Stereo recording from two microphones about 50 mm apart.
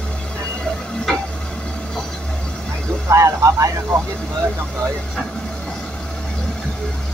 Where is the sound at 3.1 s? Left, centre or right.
Right.